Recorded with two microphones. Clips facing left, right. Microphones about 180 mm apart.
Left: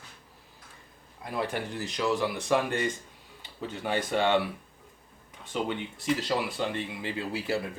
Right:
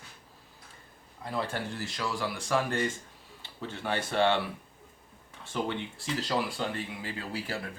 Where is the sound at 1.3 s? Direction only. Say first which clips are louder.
Left 2 dB; 15° left (ahead or behind).